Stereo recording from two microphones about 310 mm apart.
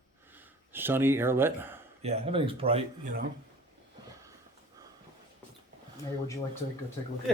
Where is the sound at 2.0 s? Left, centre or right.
Centre.